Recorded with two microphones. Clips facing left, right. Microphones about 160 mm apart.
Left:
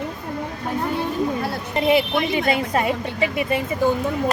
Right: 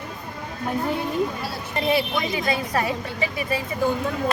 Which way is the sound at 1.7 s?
20° left (ahead or behind).